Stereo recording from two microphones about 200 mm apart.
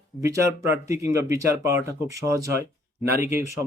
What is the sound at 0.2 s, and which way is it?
Speech, 15° right (ahead or behind).